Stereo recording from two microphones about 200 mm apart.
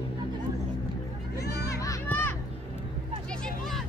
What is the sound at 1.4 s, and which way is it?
Children playing, 55° left (ahead or behind).